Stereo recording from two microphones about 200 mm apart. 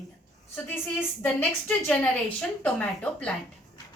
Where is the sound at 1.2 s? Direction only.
10° left (ahead or behind).